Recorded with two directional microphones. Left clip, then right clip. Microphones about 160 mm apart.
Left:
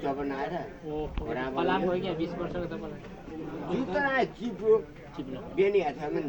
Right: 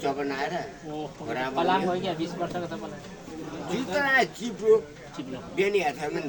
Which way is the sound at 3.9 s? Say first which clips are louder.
Right 5 dB; 25° right (ahead or behind).